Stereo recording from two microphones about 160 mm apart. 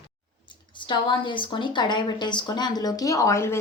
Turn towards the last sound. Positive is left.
turn(degrees=15)  # may be behind; listen again after turning